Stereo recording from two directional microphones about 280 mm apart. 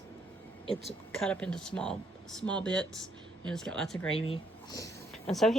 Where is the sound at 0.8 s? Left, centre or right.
Centre.